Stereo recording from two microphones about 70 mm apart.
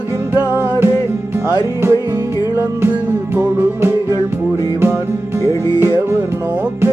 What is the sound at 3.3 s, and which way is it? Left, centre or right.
Music, right.